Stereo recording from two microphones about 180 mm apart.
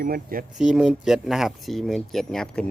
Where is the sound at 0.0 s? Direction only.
50° right (ahead or behind).